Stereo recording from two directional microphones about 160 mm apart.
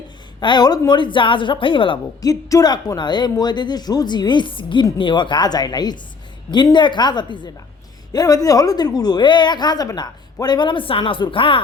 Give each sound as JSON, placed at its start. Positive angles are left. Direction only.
{"t": 0.3, "sound": "a woman's voice", "side_deg": 25}